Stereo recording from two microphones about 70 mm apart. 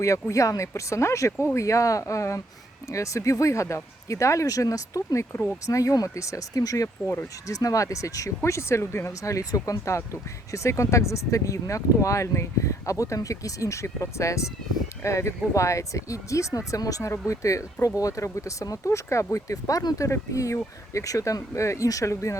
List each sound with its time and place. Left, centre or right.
0.0 s speech: left